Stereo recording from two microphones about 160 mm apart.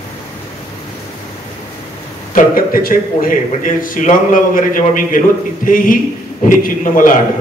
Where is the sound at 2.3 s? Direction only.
65° left (ahead or behind).